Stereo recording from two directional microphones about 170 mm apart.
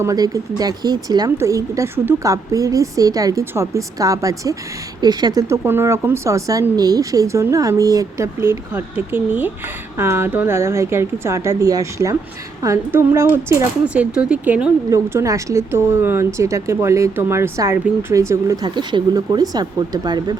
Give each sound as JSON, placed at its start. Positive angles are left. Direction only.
{"t": 0.0, "sound": "speech", "side_deg": -20}